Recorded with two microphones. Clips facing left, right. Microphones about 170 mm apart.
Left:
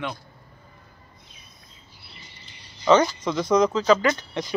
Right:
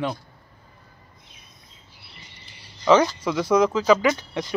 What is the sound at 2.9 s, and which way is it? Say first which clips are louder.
Speech: right 1 dB; 5° right (ahead or behind).